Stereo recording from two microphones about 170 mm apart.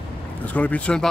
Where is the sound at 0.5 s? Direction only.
10° left (ahead or behind).